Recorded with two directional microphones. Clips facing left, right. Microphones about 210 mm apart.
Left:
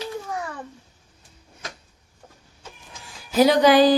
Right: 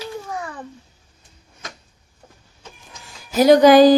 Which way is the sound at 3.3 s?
45° right (ahead or behind).